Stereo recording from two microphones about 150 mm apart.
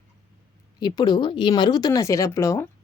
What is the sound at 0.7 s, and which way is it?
Speech, 25° left (ahead or behind).